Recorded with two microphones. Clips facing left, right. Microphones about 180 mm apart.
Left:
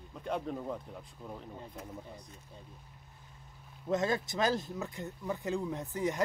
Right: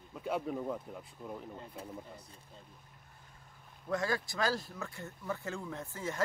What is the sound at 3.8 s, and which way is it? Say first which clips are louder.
Speech: left 3 dB; 20° left (ahead or behind).